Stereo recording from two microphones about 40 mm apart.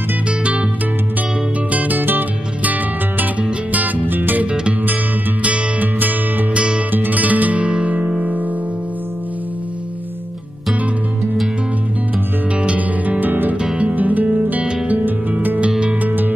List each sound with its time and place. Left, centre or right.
1.7 s music: right
5.4 s music: right
6.5 s music: right
6.9 s music: right
12.5 s music: right
13.2 s music: right